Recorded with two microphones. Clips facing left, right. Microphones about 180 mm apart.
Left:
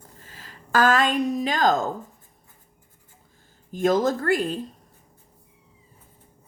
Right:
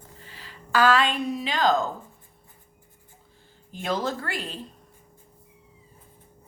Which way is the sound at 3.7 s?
45° left (ahead or behind).